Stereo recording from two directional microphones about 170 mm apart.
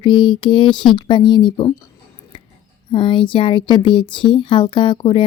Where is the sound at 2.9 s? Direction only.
30° left (ahead or behind).